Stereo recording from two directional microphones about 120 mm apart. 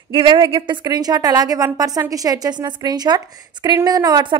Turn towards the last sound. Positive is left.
turn(degrees=-35)  # may be behind; listen again after turning